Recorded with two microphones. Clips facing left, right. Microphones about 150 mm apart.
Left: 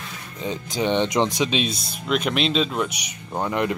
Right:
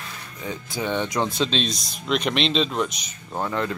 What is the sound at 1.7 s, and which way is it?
Speech, 55° left (ahead or behind).